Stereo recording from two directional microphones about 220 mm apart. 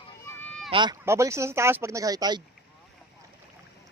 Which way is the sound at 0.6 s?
20° right (ahead or behind).